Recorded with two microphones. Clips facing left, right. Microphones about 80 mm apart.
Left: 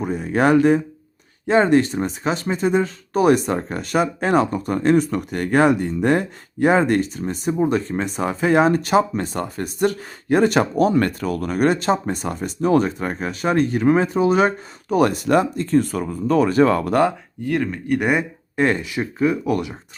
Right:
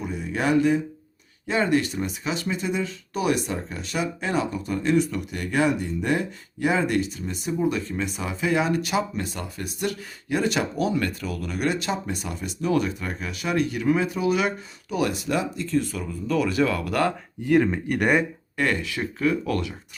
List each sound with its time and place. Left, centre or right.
0.0 s speech: left
17.4 s speech: centre
18.5 s speech: left